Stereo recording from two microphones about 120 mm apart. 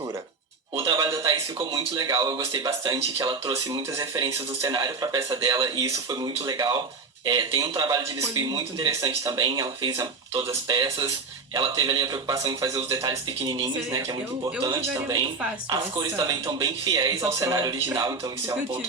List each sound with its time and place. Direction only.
0.8 s a sound: 30° right (ahead or behind)
1.1 s a man's voice: 25° right (ahead or behind)
14.9 s a man's voice: 25° right (ahead or behind)